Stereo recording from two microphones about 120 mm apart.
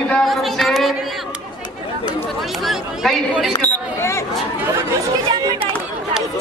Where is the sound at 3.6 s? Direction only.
20° left (ahead or behind).